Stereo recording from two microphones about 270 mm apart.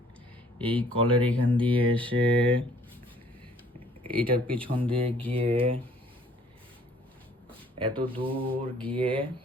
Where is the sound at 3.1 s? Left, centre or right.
Centre.